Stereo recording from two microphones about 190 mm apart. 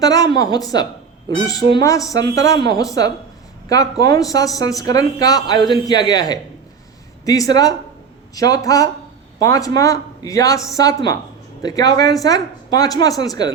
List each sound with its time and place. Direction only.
0.0 s speech: 20° left (ahead or behind)